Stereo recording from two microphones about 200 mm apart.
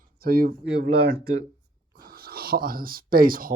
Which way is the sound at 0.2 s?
45° right (ahead or behind).